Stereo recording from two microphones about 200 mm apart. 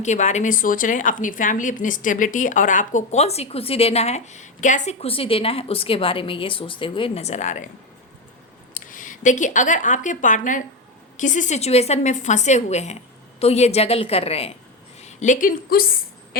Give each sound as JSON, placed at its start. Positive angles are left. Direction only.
{"t": 0.0, "sound": "a woman's voice", "side_deg": 35}
{"t": 8.9, "sound": "a woman's voice", "side_deg": 40}
{"t": 16.3, "sound": "a sound", "side_deg": 50}